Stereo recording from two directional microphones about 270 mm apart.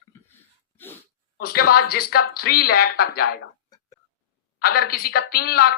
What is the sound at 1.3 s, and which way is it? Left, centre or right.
A woman's voice, left.